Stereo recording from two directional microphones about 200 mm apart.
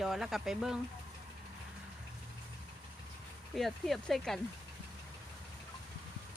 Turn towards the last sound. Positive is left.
turn(degrees=0)  # may be behind; listen again after turning